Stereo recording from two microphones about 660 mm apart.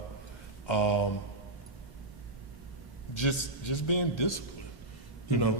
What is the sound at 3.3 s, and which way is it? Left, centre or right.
A man's voice, left.